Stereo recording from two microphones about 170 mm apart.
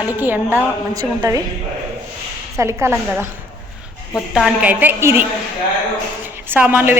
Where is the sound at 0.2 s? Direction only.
10° right (ahead or behind).